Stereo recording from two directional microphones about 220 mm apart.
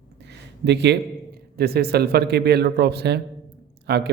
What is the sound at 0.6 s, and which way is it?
Speech, 50° right (ahead or behind).